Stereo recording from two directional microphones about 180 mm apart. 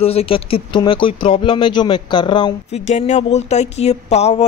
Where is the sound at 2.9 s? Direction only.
40° left (ahead or behind).